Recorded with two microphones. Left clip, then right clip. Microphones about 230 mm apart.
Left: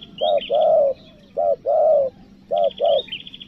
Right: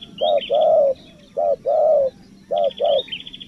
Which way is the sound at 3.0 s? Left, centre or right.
Left.